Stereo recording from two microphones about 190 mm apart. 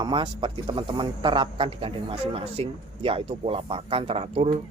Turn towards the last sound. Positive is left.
turn(degrees=-30)  # may be behind; listen again after turning